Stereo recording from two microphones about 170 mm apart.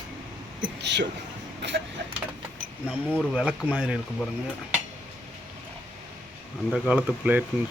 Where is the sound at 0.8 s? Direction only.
90° right.